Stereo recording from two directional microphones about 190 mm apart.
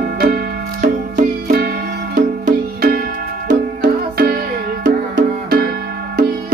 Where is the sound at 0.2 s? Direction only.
50° right (ahead or behind).